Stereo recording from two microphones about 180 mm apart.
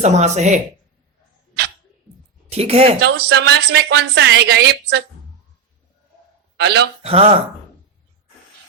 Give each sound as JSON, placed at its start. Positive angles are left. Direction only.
{"t": 0.0, "sound": "speech", "side_deg": -40}
{"t": 2.5, "sound": "speech", "side_deg": -35}
{"t": 3.0, "sound": "a woman's voice", "side_deg": -65}
{"t": 6.6, "sound": "a woman's voice", "side_deg": -65}
{"t": 7.0, "sound": "speech", "side_deg": -35}